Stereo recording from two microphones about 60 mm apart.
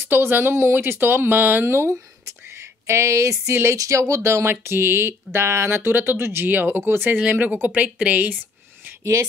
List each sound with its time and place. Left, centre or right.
0.1 s speech: right
1.7 s speech: right
3.7 s speech: right
7.2 s speech: right
9.0 s speech: right